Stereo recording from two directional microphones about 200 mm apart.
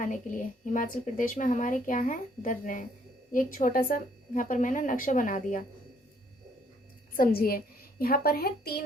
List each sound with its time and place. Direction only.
0.0 s a woman's voice: 40° left (ahead or behind)
7.1 s a woman's voice: 45° left (ahead or behind)